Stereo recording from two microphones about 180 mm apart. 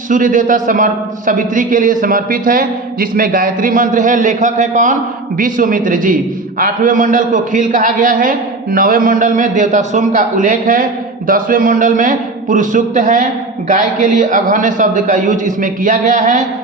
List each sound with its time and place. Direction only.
0.1 s a man's voice: 50° right (ahead or behind)